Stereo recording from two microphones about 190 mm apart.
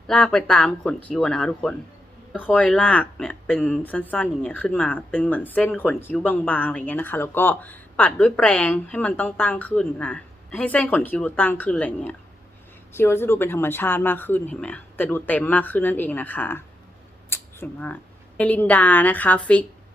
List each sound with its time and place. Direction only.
0.1 s speech: 5° left (ahead or behind)
2.6 s speech: 5° left (ahead or behind)
17.2 s a sound: 10° left (ahead or behind)
18.3 s speech: 10° left (ahead or behind)